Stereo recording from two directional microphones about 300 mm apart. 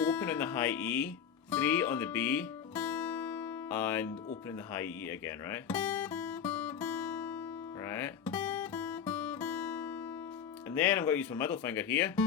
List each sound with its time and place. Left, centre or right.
0.0 s music: centre
4.7 s guitar: centre
10.7 s speech: centre